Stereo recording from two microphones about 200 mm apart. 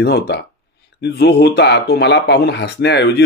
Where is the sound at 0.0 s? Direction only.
55° left (ahead or behind).